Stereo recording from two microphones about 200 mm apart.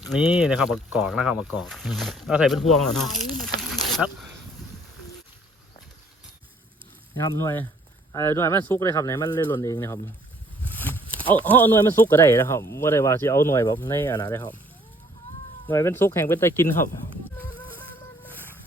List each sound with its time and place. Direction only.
0.0 s speech: 5° right (ahead or behind)
7.3 s speech: 15° left (ahead or behind)
10.7 s a sound: 10° left (ahead or behind)
11.0 s a sound: 25° right (ahead or behind)
11.4 s speech: 10° left (ahead or behind)
15.7 s speech: 10° left (ahead or behind)
17.3 s music: 10° left (ahead or behind)